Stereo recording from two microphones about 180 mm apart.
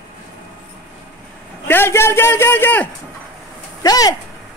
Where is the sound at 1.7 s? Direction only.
15° left (ahead or behind).